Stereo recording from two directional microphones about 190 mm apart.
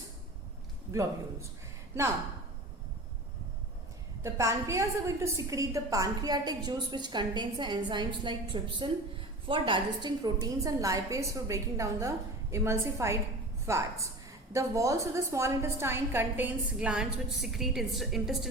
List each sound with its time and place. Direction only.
0.9 s a woman's voice: 15° right (ahead or behind)
4.2 s a woman's voice: 15° right (ahead or behind)